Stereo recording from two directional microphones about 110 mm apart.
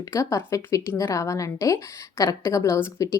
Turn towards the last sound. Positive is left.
turn(degrees=25)  # may be behind; listen again after turning